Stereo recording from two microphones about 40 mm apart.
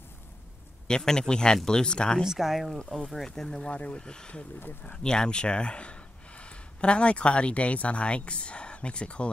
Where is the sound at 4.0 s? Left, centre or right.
Centre.